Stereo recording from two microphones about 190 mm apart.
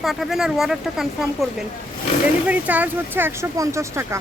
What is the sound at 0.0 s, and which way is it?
Speech, centre (ahead or behind).